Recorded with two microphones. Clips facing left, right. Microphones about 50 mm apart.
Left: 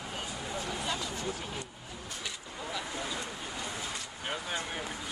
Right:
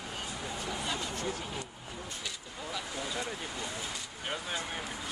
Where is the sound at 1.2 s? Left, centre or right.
Centre.